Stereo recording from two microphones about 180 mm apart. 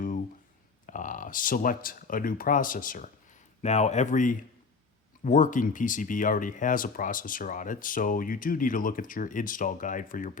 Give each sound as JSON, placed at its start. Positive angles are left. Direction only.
{"t": 0.9, "sound": "speech", "side_deg": 45}
{"t": 3.6, "sound": "speech", "side_deg": 40}